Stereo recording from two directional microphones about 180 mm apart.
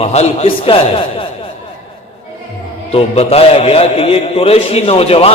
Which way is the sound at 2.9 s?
35° left (ahead or behind).